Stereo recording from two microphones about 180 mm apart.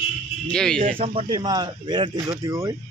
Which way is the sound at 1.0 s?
30° right (ahead or behind).